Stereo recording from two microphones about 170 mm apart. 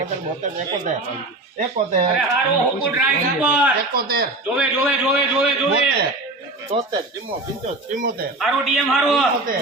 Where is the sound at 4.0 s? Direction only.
65° right (ahead or behind).